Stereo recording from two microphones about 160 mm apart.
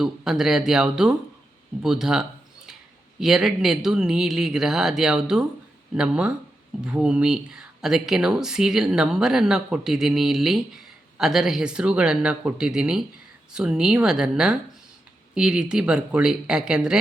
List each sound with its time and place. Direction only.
0.0 s speech: 5° right (ahead or behind)